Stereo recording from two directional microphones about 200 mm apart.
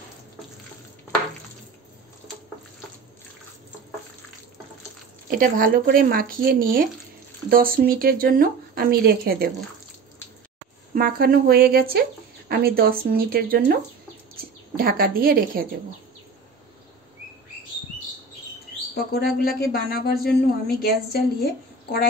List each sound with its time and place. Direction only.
5.3 s speech: 45° right (ahead or behind)
11.0 s speech: 50° right (ahead or behind)
14.8 s speech: 50° right (ahead or behind)
19.1 s a woman's voice: 50° left (ahead or behind)